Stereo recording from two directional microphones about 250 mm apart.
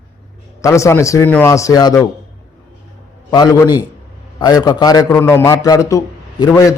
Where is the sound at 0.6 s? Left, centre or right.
Centre.